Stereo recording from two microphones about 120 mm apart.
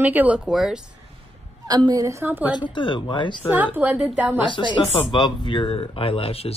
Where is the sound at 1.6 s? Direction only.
30° right (ahead or behind).